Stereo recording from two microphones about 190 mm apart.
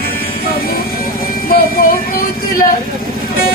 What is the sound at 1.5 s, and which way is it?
Speech, 50° left (ahead or behind).